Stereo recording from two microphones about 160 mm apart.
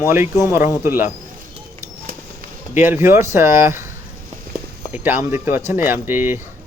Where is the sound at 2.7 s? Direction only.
15° right (ahead or behind).